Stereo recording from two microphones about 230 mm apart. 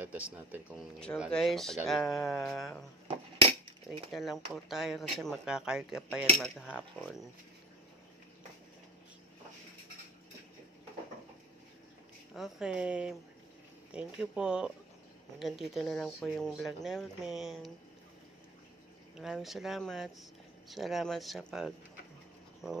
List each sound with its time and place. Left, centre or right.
0.0 s speech: centre
3.1 s cutlery: right
4.1 s speech: centre
12.4 s speech: centre
19.1 s speech: centre